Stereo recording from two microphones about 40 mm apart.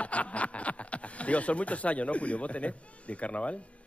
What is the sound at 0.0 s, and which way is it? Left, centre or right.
Speech, left.